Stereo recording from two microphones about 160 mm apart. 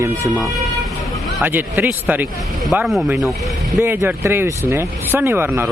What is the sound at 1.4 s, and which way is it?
Speech, 10° right (ahead or behind).